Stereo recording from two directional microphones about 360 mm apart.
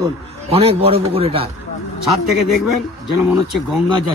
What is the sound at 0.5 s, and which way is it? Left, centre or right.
Speech, centre.